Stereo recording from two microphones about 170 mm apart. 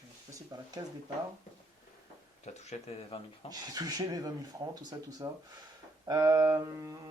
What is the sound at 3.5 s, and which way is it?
Speech, 20° right (ahead or behind).